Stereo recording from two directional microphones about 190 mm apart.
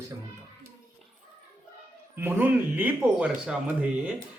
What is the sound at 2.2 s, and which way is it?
Speech, 10° right (ahead or behind).